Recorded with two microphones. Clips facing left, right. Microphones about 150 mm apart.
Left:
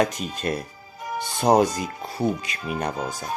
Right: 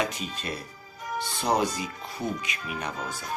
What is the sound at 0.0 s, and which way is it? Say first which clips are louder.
Speech: left 7 dB; 45° left (ahead or behind).